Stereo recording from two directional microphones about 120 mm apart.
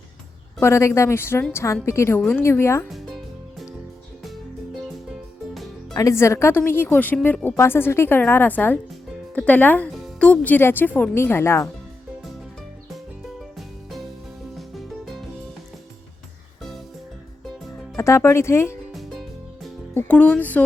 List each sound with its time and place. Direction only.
0.6 s speech: 20° left (ahead or behind)
4.2 s music: centre (ahead or behind)
5.9 s speech: 30° left (ahead or behind)
14.8 s music: centre (ahead or behind)
17.9 s speech: 25° left (ahead or behind)
19.9 s speech: 15° left (ahead or behind)